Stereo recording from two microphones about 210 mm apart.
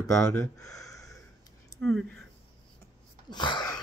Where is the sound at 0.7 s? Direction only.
15° left (ahead or behind).